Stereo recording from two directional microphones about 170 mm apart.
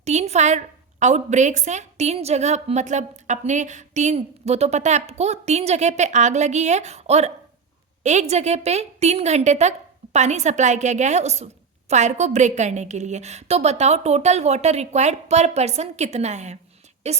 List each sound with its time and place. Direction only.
0.0 s a woman's voice: 40° right (ahead or behind)